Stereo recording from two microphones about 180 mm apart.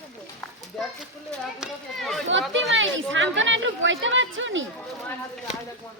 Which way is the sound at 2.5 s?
90° right.